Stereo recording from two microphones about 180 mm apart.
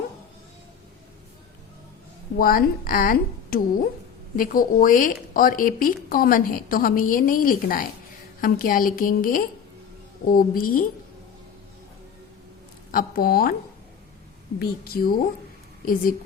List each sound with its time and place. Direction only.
2.4 s a woman's voice: 50° left (ahead or behind)
12.9 s a woman's voice: 55° left (ahead or behind)
14.6 s a woman's voice: 55° left (ahead or behind)